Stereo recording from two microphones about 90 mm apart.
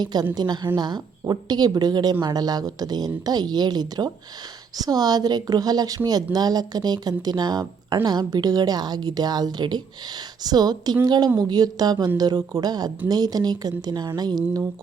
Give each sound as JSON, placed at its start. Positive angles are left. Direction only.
{"t": 0.0, "sound": "speech", "side_deg": -50}